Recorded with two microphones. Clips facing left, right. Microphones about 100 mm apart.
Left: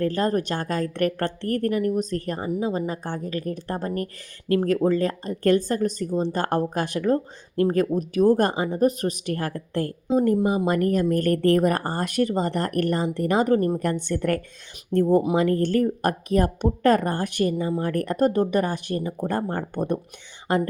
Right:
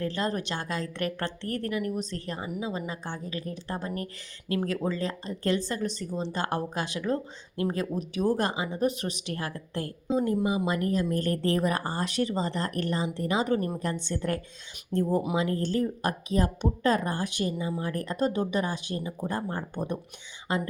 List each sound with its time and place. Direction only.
0.0 s speech: 45° left (ahead or behind)